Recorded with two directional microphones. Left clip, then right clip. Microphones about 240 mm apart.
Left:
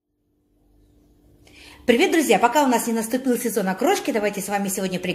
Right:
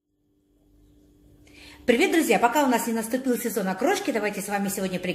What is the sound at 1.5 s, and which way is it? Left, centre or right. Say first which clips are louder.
A woman's voice: left 3 dB; centre.